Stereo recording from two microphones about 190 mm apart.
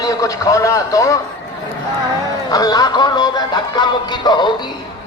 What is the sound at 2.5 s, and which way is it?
Music, 20° left (ahead or behind).